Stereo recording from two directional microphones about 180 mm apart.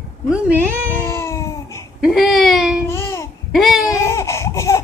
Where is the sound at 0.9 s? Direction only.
15° left (ahead or behind).